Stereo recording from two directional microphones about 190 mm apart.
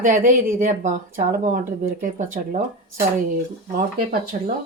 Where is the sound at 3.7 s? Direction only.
50° right (ahead or behind).